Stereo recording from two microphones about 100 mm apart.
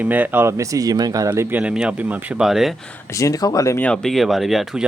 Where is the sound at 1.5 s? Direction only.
10° right (ahead or behind).